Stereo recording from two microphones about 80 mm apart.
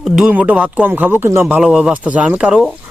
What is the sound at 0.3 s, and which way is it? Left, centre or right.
Speech, centre.